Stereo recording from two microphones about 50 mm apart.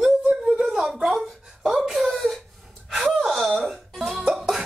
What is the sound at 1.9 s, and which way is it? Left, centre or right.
Wail, centre.